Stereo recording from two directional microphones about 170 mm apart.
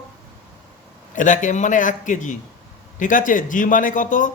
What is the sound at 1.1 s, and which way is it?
A man's voice, 50° left (ahead or behind).